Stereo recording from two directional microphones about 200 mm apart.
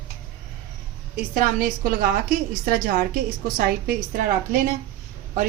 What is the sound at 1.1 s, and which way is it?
A woman's voice, 45° right (ahead or behind).